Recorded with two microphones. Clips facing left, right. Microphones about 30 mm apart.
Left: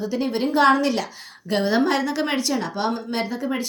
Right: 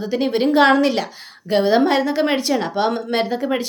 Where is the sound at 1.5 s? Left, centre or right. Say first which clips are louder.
Right 5 dB; centre.